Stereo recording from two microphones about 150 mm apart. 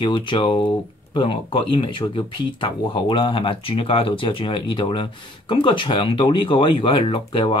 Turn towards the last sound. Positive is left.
turn(degrees=35)  # may be behind; listen again after turning